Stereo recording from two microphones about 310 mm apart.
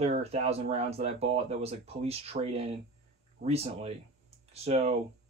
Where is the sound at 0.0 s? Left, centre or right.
Centre.